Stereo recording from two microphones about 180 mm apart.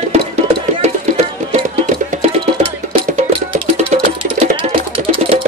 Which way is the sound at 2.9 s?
30° right (ahead or behind).